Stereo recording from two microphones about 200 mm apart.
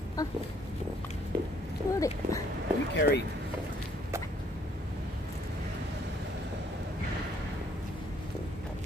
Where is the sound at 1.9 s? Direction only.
15° left (ahead or behind).